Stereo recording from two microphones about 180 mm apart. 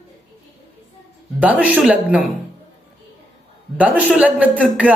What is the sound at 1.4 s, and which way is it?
Speech, 5° right (ahead or behind).